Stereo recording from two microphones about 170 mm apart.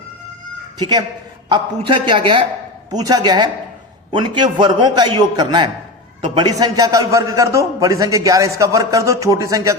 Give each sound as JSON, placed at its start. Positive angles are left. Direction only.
{"t": 0.8, "sound": "a man's voice", "side_deg": -25}